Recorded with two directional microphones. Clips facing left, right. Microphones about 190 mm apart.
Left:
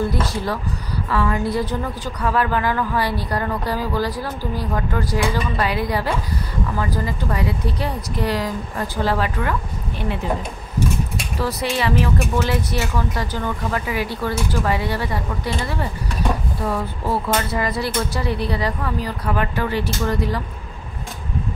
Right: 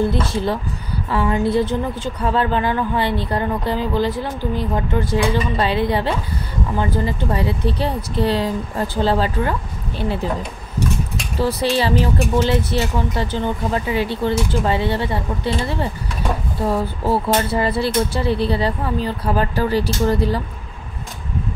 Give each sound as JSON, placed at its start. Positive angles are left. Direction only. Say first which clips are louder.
{"t": 0.1, "sound": "a woman's voice", "louder": "right 3 dB", "side_deg": -25}
{"t": 11.3, "sound": "a woman's voice", "louder": "right 5 dB", "side_deg": -30}